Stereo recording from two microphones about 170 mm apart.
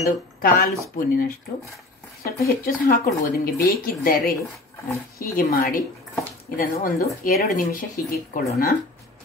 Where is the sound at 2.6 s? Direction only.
55° left (ahead or behind).